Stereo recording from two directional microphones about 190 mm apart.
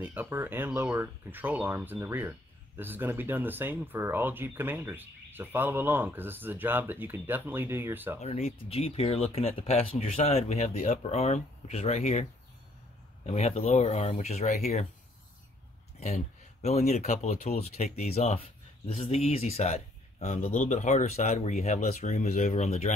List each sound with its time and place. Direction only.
0.0 s speech: 10° right (ahead or behind)
8.2 s speech: 35° left (ahead or behind)
16.6 s speech: 35° left (ahead or behind)